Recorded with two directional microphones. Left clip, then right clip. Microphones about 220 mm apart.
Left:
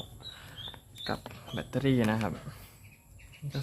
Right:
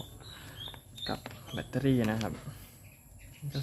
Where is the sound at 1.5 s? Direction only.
10° left (ahead or behind).